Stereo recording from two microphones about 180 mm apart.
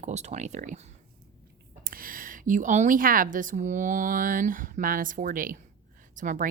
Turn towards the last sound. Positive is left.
turn(degrees=-45)  # may be behind; listen again after turning